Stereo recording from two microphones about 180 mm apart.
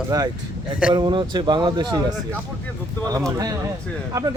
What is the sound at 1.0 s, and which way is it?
Speech, 25° right (ahead or behind).